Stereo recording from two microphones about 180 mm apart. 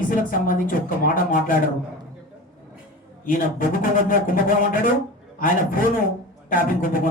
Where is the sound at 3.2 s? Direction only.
50° left (ahead or behind).